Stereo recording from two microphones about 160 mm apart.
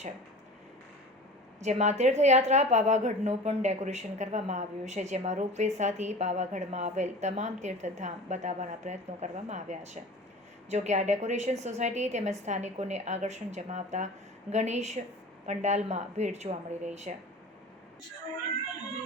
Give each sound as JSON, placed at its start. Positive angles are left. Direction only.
{"t": 1.5, "sound": "a woman's voice", "side_deg": -45}